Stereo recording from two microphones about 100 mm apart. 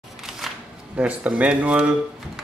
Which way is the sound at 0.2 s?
5° right (ahead or behind).